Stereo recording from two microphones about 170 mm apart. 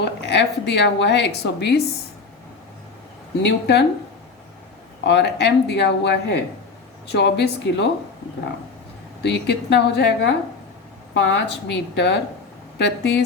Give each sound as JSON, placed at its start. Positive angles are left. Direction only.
{"t": 0.0, "sound": "a woman's voice", "side_deg": 90}
{"t": 3.4, "sound": "speech", "side_deg": 80}
{"t": 5.0, "sound": "speech", "side_deg": 85}
{"t": 9.2, "sound": "a woman's voice", "side_deg": 90}